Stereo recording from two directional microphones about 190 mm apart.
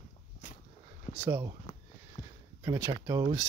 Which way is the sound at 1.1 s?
15° right (ahead or behind).